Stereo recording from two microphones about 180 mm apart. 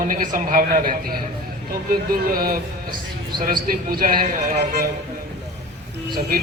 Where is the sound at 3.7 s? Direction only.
55° right (ahead or behind).